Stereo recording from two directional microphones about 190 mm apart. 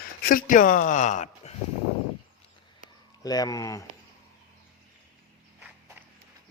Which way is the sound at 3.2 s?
20° left (ahead or behind).